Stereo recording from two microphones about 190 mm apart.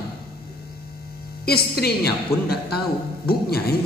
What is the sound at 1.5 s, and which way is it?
A woman's voice, 55° left (ahead or behind).